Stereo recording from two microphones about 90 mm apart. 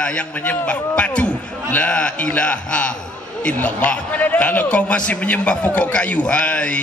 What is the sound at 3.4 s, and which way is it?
A man's voice, 15° left (ahead or behind).